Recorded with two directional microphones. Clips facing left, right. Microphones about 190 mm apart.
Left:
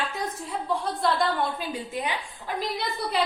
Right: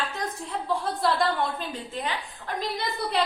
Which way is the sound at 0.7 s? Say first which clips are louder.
Even; centre (ahead or behind).